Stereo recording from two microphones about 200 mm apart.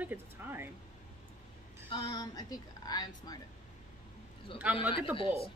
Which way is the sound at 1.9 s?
20° left (ahead or behind).